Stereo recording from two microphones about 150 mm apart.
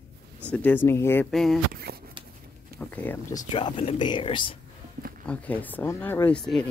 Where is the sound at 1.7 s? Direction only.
90° right.